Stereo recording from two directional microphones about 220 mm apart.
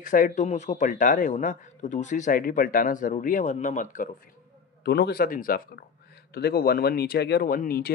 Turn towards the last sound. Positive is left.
turn(degrees=40)  # may be behind; listen again after turning